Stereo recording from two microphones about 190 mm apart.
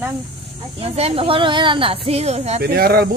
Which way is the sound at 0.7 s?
30° right (ahead or behind).